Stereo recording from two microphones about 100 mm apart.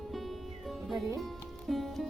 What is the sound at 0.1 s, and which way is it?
Music, centre (ahead or behind).